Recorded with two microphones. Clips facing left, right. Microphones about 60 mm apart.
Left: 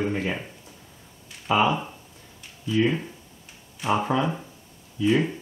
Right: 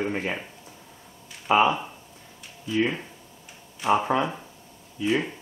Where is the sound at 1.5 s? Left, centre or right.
Right.